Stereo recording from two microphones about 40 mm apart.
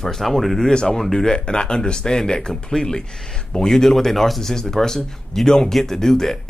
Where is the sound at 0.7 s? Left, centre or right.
Left.